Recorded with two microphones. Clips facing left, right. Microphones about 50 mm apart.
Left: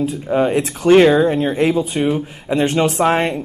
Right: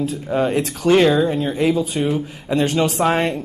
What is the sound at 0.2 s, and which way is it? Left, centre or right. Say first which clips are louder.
Speech: left 3 dB; centre.